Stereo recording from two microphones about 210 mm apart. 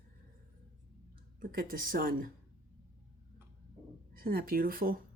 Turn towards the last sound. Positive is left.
turn(degrees=-45)  # may be behind; listen again after turning